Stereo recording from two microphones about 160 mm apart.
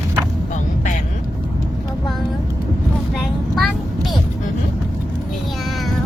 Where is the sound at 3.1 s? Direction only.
Centre (ahead or behind).